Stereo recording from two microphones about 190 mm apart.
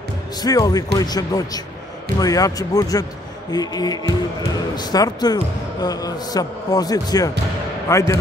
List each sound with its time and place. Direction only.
0.4 s a man's voice: 20° left (ahead or behind)